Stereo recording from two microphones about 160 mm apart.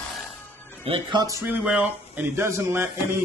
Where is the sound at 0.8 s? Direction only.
30° right (ahead or behind).